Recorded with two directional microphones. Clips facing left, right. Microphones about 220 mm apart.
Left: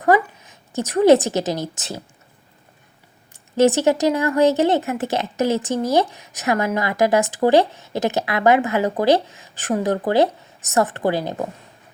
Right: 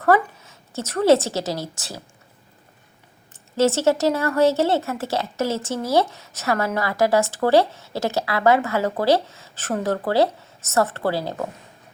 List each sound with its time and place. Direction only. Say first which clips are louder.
0.0 s a woman's voice: left 1 dB; 15° left (ahead or behind)
3.6 s a woman's voice: left 2 dB; 15° left (ahead or behind)